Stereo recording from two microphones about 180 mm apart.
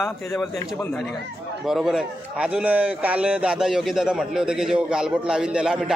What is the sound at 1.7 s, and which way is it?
A man's voice, centre (ahead or behind).